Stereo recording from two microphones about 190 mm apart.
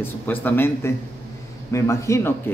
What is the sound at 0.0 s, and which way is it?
A man's voice, 10° left (ahead or behind).